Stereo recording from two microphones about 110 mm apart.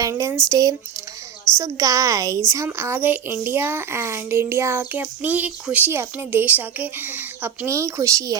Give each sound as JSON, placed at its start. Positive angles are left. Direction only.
{"t": 0.0, "sound": "a child's voice", "side_deg": -30}